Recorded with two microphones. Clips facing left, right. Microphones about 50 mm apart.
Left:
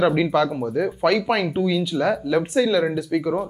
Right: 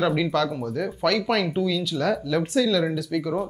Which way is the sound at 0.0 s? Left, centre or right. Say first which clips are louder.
Left 4 dB; centre.